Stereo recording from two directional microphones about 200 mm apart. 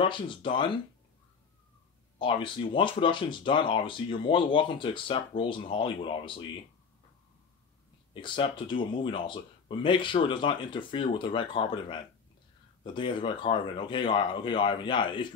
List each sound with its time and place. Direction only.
0.0 s speech: 25° left (ahead or behind)
2.1 s speech: 25° left (ahead or behind)
8.1 s speech: 25° left (ahead or behind)